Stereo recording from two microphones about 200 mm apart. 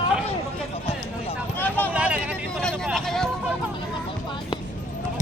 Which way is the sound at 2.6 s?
Centre (ahead or behind).